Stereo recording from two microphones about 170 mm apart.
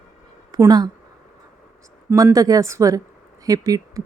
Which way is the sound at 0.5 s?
20° right (ahead or behind).